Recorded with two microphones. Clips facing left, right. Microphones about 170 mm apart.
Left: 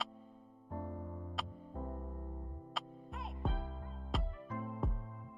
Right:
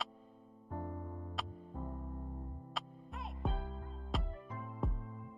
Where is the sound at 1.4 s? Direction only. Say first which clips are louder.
Even; centre (ahead or behind).